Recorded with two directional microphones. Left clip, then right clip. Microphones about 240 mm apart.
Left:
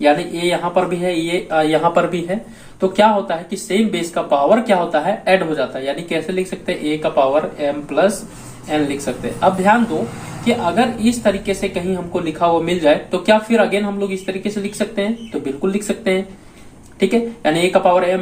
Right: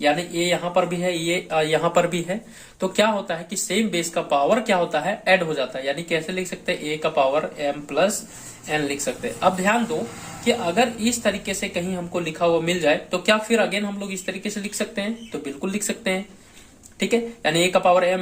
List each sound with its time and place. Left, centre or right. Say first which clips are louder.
0.0 s speech: left 6 dB; right